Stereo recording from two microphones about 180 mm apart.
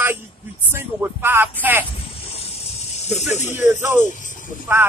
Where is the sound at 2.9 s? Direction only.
40° left (ahead or behind).